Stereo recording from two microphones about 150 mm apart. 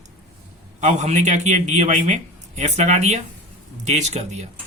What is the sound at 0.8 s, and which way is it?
Speech, 50° right (ahead or behind).